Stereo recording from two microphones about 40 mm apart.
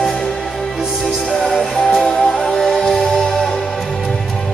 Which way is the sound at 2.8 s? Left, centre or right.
Centre.